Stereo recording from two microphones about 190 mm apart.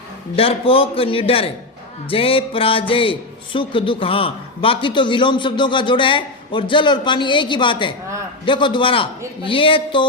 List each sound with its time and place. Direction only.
0.3 s a man's voice: 30° left (ahead or behind)